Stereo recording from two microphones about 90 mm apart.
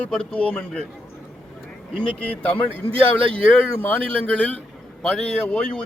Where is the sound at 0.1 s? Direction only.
10° left (ahead or behind).